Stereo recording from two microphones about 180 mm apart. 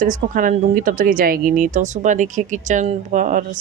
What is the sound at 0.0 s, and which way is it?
A woman's voice, 50° right (ahead or behind).